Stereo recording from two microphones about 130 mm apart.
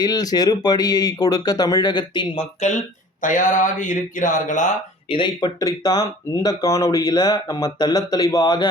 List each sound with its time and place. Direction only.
0.0 s speech: 30° left (ahead or behind)
3.2 s speech: 80° left
5.0 s speech: 40° left (ahead or behind)